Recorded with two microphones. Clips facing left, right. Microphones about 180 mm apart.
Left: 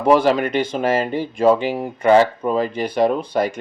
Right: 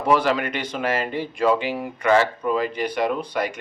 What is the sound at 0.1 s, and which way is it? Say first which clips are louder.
Speech: left 5 dB; 35° left (ahead or behind).